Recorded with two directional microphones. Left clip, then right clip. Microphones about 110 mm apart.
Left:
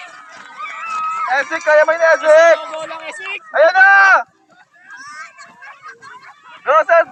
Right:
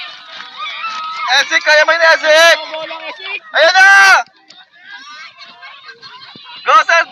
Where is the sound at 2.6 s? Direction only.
60° right (ahead or behind).